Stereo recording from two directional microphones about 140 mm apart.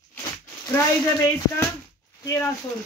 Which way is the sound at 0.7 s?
20° left (ahead or behind).